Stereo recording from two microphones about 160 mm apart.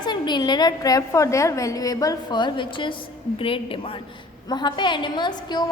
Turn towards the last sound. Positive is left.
turn(degrees=25)  # may be behind; listen again after turning